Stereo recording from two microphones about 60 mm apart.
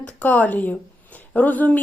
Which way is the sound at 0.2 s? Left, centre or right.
Left.